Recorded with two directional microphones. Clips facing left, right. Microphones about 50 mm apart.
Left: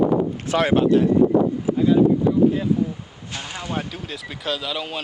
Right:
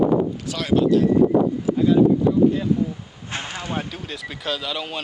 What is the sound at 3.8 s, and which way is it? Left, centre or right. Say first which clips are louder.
Speech: even; centre.